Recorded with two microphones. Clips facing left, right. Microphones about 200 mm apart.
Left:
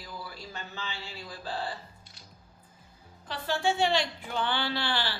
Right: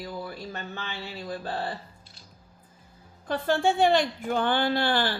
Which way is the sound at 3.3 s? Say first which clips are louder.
Right 5 dB; 50° right (ahead or behind).